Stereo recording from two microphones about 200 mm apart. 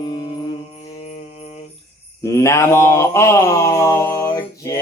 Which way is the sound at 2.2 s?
15° left (ahead or behind).